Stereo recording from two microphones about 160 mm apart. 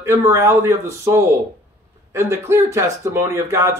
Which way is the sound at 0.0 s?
15° right (ahead or behind).